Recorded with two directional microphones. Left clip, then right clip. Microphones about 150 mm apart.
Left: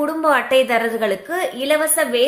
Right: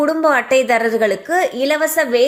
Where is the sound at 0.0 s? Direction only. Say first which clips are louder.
Right 2 dB; 35° right (ahead or behind).